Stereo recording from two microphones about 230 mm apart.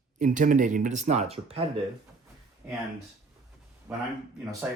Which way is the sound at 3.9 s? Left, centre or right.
Centre.